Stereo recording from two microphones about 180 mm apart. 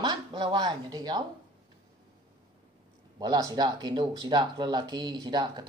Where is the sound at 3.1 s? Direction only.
20° right (ahead or behind).